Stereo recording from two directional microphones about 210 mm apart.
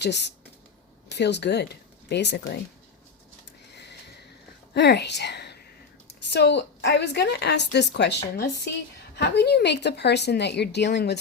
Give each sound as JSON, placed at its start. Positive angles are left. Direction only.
{"t": 0.0, "sound": "speech", "side_deg": 55}
{"t": 4.7, "sound": "a woman's voice", "side_deg": 55}